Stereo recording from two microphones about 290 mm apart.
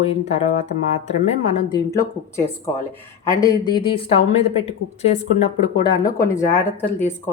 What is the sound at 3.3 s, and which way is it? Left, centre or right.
Speech, centre.